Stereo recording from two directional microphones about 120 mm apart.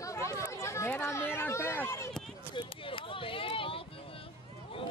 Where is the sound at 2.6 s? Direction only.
45° left (ahead or behind).